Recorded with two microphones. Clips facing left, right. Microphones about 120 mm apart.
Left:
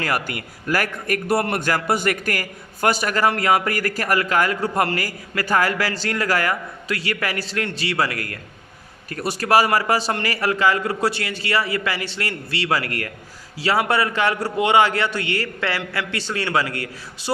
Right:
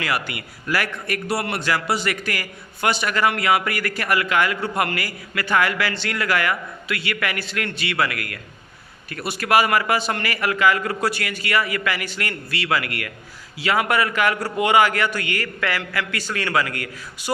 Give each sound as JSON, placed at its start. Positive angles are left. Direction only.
{"t": 0.0, "sound": "a man's voice", "side_deg": 45}